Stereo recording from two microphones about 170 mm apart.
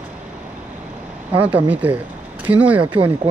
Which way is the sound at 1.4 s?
10° right (ahead or behind).